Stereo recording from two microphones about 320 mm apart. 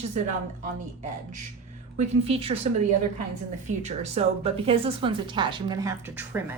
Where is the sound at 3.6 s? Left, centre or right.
Right.